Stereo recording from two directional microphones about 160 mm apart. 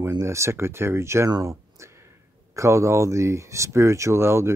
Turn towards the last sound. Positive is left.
turn(degrees=-15)  # may be behind; listen again after turning